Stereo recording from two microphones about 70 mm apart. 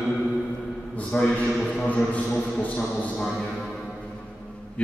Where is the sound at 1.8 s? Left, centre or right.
Left.